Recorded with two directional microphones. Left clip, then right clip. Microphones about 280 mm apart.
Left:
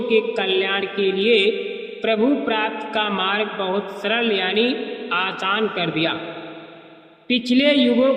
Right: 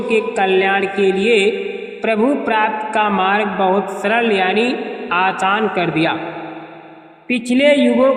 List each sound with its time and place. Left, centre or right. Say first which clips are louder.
0.1 s a man's voice: right 4 dB; right
7.5 s a man's voice: right 5 dB; right